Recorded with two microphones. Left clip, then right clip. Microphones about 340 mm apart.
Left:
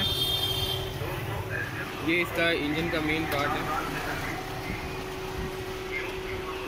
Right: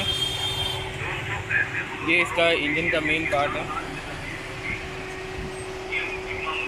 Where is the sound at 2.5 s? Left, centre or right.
Right.